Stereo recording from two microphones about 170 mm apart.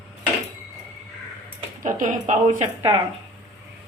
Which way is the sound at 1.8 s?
50° right (ahead or behind).